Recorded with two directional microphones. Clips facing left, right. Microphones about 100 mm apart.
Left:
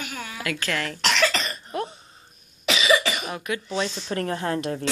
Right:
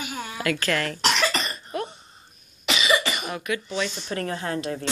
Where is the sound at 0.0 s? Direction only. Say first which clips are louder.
Right 2 dB; 15° right (ahead or behind).